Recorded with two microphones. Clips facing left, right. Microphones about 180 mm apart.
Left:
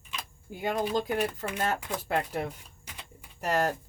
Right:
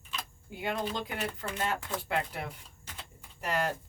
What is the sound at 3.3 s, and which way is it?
Speech, 40° left (ahead or behind).